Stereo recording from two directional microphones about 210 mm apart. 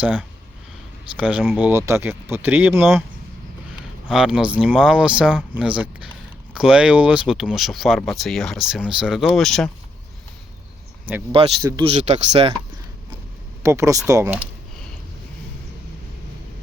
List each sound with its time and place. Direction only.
0.0 s speech: 5° right (ahead or behind)
4.1 s speech: 5° right (ahead or behind)
11.3 s speech: 25° right (ahead or behind)
13.6 s speech: 15° right (ahead or behind)